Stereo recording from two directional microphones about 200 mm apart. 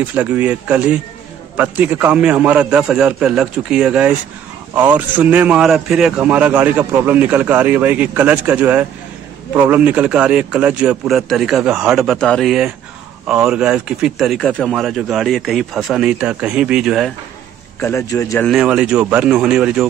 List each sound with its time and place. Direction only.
0.1 s a man's voice: 5° right (ahead or behind)
17.7 s a man's voice: 15° left (ahead or behind)
18.5 s speech: 5° right (ahead or behind)